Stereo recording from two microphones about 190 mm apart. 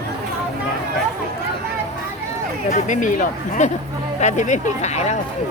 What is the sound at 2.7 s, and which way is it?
Speech, 40° left (ahead or behind).